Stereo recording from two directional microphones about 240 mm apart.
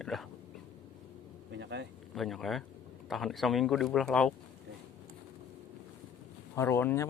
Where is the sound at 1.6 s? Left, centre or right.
Right.